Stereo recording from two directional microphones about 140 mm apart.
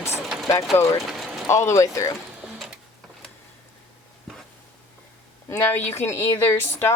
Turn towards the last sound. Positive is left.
turn(degrees=15)  # may be behind; listen again after turning